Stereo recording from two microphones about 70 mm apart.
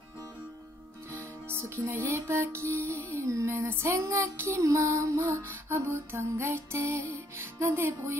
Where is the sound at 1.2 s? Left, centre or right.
Right.